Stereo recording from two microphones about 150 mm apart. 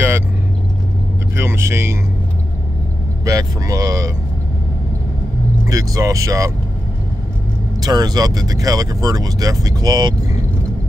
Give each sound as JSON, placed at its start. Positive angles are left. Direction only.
{"t": 1.3, "sound": "speech", "side_deg": -15}
{"t": 3.3, "sound": "speech", "side_deg": -25}
{"t": 5.7, "sound": "speech", "side_deg": -20}
{"t": 7.8, "sound": "speech", "side_deg": -25}